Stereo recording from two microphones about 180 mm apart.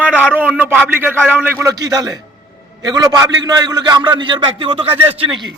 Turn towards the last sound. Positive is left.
turn(degrees=-30)  # may be behind; listen again after turning